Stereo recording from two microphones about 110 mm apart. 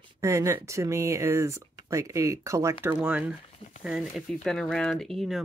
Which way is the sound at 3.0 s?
10° right (ahead or behind).